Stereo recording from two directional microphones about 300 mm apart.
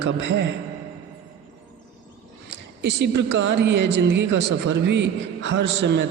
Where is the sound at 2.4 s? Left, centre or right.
Right.